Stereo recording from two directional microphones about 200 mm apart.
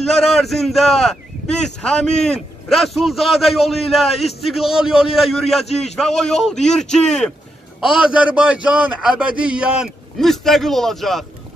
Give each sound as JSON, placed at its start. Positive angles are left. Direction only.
{"t": 0.0, "sound": "a man's voice", "side_deg": 0}
{"t": 5.7, "sound": "a man's voice", "side_deg": 30}
{"t": 5.9, "sound": "a man's voice", "side_deg": 0}